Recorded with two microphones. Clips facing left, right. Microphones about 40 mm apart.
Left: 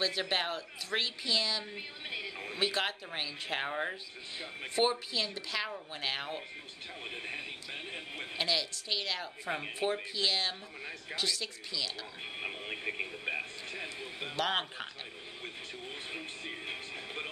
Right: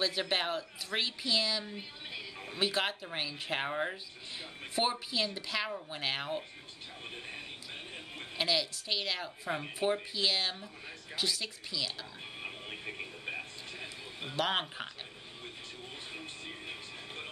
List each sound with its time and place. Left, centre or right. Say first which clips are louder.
0.0 s speech: even; centre
1.8 s a woman's voice: left 3 dB; left
2.5 s speech: right 1 dB; centre
7.1 s speech: left 4 dB; left
8.4 s speech: right 2 dB; centre
12.4 s radio: left 4 dB; left
14.3 s speech: right 1 dB; centre
16.1 s music: left 3 dB; left